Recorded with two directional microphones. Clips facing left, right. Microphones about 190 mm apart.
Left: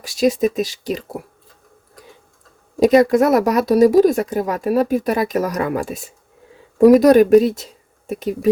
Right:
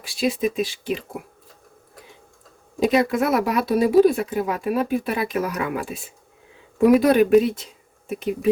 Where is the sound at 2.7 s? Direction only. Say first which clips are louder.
Left 7 dB; 40° left (ahead or behind).